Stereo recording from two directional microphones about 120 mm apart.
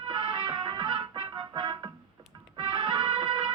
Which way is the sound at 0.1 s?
40° right (ahead or behind).